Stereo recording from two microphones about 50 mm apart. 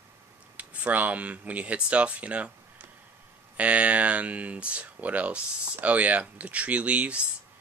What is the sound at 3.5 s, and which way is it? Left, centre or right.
Speech, right.